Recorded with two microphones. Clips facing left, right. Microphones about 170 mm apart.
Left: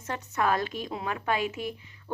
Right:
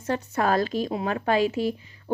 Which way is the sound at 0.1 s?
35° right (ahead or behind).